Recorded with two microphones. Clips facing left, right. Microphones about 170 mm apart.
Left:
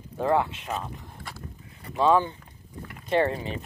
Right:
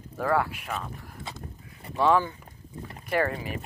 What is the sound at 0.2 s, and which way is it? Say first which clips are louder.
Speech: left 2 dB; 25° left (ahead or behind).